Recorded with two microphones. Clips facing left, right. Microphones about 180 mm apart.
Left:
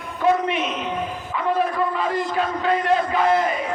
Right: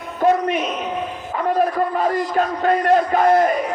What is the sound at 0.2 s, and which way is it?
Speech, 45° right (ahead or behind).